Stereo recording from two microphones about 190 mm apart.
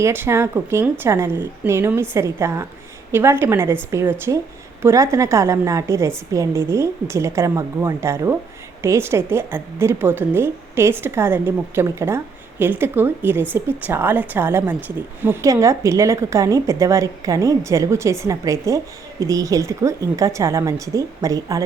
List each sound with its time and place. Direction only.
0.0 s a woman's voice: 15° right (ahead or behind)